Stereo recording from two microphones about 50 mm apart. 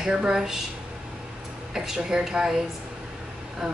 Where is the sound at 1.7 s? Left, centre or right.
Centre.